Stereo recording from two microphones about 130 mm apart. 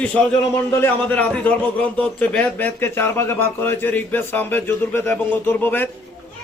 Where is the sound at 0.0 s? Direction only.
10° left (ahead or behind).